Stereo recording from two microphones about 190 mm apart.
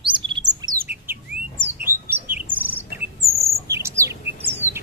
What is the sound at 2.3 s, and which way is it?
Chirp, 10° right (ahead or behind).